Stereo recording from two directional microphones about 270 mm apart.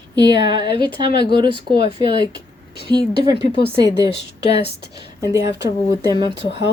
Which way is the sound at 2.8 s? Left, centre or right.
Centre.